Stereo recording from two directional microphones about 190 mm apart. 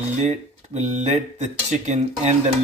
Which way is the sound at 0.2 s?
35° right (ahead or behind).